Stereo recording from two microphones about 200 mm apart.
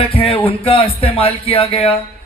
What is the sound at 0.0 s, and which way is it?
Music, 30° left (ahead or behind).